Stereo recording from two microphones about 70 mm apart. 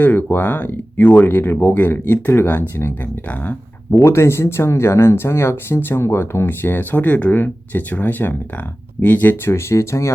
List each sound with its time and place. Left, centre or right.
0.0 s speech: left
4.0 s speech: left
9.4 s speech: left